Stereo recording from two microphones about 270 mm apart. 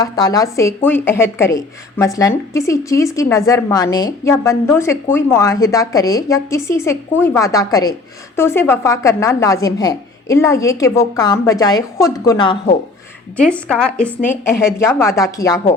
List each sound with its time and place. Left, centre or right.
0.0 s a woman's voice: centre
13.7 s a woman's voice: centre